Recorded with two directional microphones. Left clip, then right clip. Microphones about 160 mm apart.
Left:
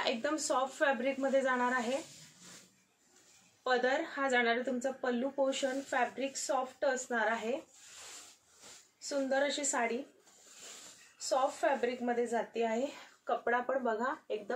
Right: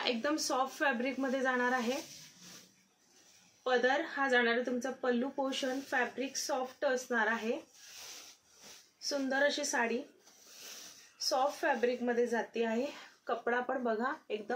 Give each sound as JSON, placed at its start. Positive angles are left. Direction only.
{"t": 0.0, "sound": "speech", "side_deg": -15}
{"t": 3.6, "sound": "speech", "side_deg": -15}
{"t": 9.3, "sound": "speech", "side_deg": -15}
{"t": 11.2, "sound": "speech", "side_deg": -15}